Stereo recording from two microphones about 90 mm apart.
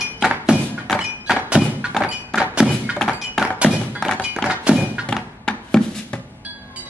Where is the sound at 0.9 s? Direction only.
10° right (ahead or behind).